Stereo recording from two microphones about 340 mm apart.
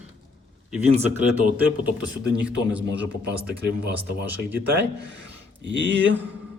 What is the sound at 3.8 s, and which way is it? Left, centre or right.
Speech, right.